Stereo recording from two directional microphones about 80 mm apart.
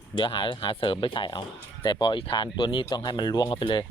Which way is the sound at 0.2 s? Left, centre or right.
Left.